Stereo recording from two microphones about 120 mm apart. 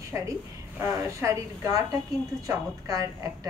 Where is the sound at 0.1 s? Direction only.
25° right (ahead or behind).